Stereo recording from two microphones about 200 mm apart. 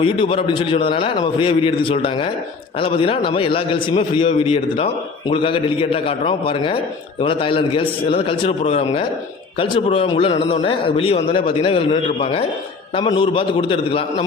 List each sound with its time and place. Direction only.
0.0 s a man's voice: 25° left (ahead or behind)